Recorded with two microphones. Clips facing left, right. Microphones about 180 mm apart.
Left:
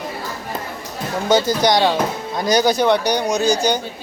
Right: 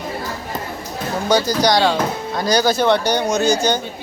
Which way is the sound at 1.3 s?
20° left (ahead or behind).